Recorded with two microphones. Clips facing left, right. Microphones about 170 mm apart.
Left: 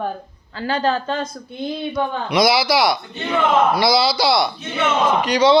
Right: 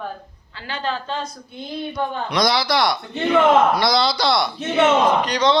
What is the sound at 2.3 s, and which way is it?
A man's voice, 5° left (ahead or behind).